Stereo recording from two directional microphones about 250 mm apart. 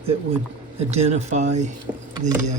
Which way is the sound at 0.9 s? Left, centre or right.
Right.